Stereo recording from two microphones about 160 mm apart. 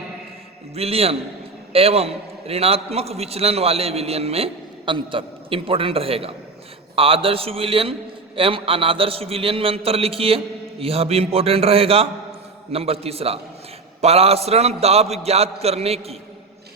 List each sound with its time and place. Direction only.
0.7 s a man's voice: 40° right (ahead or behind)